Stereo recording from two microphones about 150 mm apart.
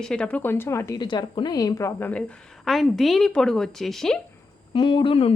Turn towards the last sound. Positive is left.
turn(degrees=35)  # may be behind; listen again after turning